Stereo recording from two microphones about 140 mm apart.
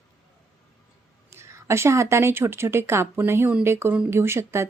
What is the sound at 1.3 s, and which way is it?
A woman's voice, 20° right (ahead or behind).